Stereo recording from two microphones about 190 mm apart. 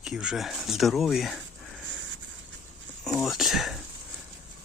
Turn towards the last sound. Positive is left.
turn(degrees=0)  # may be behind; listen again after turning